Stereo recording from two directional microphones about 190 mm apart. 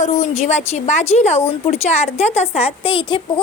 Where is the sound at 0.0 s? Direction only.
35° left (ahead or behind).